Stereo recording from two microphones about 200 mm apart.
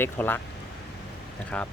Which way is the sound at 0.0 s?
10° left (ahead or behind).